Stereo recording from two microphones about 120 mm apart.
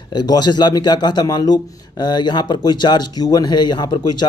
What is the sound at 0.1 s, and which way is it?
A man's voice, 35° left (ahead or behind).